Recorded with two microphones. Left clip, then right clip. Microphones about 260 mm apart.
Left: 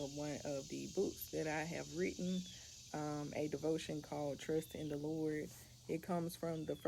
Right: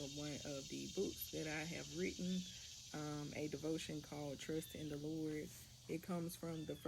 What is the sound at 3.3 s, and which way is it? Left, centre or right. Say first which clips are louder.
Speech: left 5 dB; left.